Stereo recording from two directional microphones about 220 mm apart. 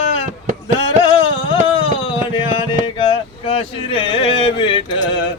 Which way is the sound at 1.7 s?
25° left (ahead or behind).